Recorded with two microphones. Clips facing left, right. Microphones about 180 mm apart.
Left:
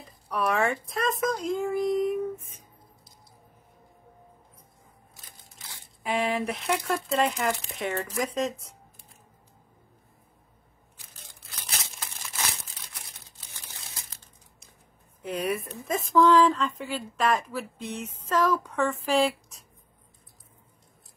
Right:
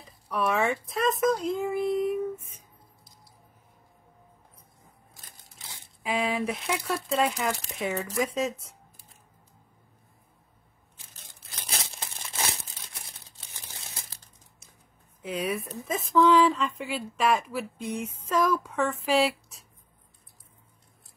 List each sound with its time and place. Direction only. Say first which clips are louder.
0.3 s speech: even; centre (ahead or behind)
6.0 s a woman's voice: left 1 dB; centre (ahead or behind)
11.5 s crumpling: right 2 dB; 30° right (ahead or behind)
15.2 s a woman's voice: left 1 dB; centre (ahead or behind)